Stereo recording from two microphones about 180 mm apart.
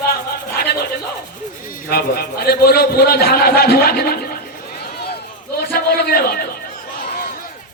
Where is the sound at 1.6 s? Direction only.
55° left (ahead or behind).